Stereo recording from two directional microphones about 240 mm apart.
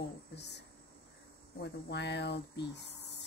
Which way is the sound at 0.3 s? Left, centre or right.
Left.